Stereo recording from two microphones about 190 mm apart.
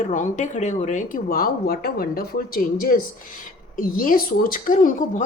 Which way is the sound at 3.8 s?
45° left (ahead or behind).